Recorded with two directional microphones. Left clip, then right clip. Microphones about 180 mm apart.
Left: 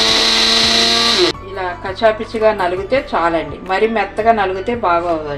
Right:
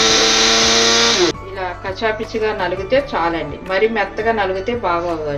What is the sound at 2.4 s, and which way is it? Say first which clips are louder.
Speech: left 7 dB; 35° left (ahead or behind).